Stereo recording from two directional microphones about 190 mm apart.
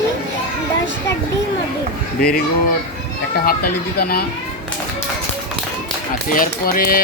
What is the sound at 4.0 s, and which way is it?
Speech, 55° left (ahead or behind).